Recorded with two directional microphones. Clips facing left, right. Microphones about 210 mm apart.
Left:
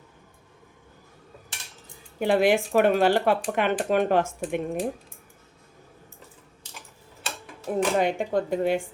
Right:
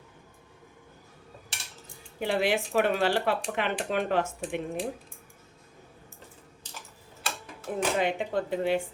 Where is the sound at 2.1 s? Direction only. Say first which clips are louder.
Left 6 dB; 50° left (ahead or behind).